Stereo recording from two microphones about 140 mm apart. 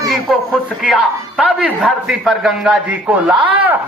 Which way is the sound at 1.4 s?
10° right (ahead or behind).